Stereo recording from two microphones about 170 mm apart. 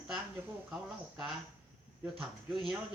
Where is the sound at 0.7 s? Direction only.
5° right (ahead or behind).